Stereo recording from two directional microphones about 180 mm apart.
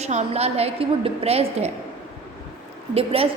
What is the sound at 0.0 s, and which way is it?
A woman's voice, 35° right (ahead or behind).